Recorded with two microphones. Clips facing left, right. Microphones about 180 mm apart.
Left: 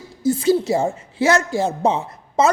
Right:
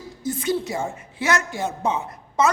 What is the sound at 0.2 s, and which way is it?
A woman's voice, 30° left (ahead or behind).